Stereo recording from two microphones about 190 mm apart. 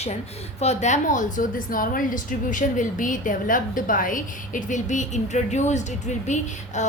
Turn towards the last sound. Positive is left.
turn(degrees=40)  # may be behind; listen again after turning